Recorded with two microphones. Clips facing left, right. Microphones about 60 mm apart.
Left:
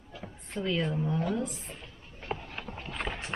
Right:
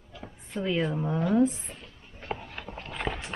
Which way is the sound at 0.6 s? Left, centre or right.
Centre.